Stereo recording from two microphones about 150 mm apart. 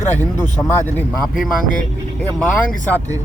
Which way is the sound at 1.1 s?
Centre (ahead or behind).